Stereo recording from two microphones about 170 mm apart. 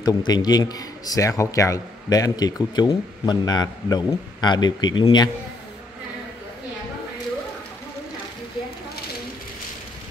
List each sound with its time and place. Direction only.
0.0 s a man's voice: 25° left (ahead or behind)